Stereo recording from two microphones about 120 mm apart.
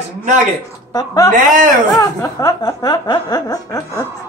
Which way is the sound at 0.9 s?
35° left (ahead or behind).